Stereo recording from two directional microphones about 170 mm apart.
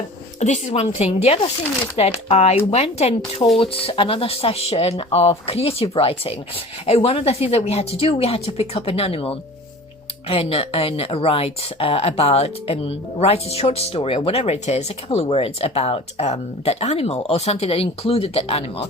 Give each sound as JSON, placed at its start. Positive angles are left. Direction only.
{"t": 0.3, "sound": "speech", "side_deg": 45}